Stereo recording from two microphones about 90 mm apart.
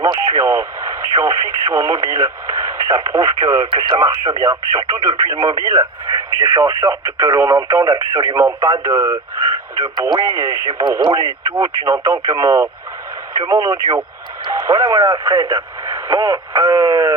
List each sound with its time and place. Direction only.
0.0 s speech: 30° right (ahead or behind)
10.8 s speech: 45° right (ahead or behind)
11.4 s speech: 30° right (ahead or behind)